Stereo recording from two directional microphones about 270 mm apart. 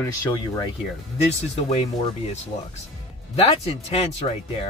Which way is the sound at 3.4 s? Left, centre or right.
Left.